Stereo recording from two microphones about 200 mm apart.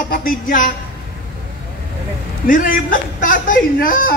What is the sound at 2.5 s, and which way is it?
A man's voice, 45° left (ahead or behind).